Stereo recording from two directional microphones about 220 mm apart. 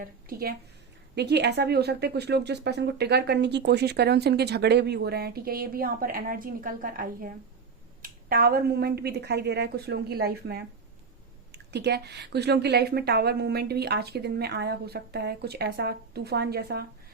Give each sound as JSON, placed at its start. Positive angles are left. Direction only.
{"t": 0.0, "sound": "a woman's voice", "side_deg": -40}